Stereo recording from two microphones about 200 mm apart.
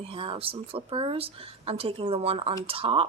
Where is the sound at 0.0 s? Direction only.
25° right (ahead or behind).